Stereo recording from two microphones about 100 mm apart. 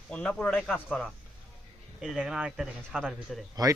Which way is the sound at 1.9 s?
10° right (ahead or behind).